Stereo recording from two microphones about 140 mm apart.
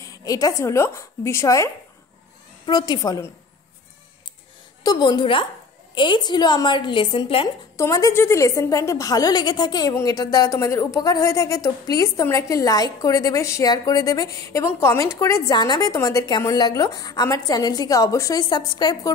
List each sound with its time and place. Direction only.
0.0 s speech: 25° left (ahead or behind)
4.8 s a woman's voice: 30° left (ahead or behind)
7.7 s speech: 20° left (ahead or behind)